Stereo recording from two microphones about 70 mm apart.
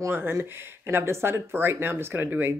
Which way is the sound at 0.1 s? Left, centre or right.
Right.